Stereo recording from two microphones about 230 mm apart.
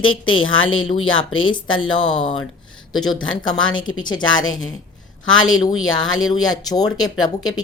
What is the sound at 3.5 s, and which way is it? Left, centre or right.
Speech, left.